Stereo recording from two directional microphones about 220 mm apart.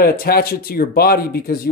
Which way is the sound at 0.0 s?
40° left (ahead or behind).